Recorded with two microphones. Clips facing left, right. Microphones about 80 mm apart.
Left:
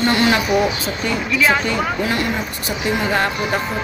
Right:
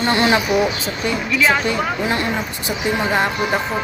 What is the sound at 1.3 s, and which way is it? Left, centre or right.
Speech, centre.